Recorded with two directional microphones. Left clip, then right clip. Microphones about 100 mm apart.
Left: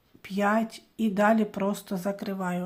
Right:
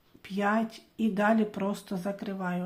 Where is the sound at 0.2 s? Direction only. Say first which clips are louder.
Left 3 dB; 35° left (ahead or behind).